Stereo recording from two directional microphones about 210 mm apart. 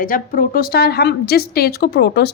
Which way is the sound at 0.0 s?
40° left (ahead or behind).